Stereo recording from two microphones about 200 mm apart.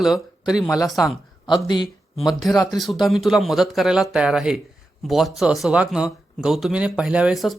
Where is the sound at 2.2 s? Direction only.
Centre (ahead or behind).